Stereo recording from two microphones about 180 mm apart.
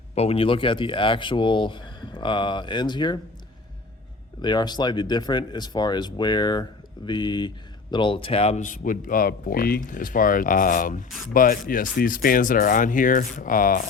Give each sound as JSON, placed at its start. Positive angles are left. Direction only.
{"t": 0.1, "sound": "speech", "side_deg": 35}
{"t": 4.4, "sound": "speech", "side_deg": 25}